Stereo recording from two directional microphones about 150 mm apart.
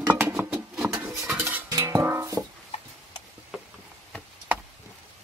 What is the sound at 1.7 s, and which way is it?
Music, 20° right (ahead or behind).